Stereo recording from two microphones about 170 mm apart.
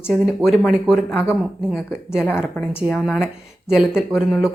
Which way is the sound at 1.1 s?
15° left (ahead or behind).